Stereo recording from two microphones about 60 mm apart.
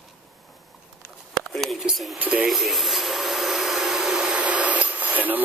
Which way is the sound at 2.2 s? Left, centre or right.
Right.